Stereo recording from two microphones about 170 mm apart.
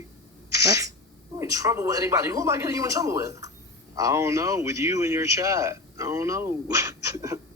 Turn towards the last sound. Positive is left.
turn(degrees=-15)  # may be behind; listen again after turning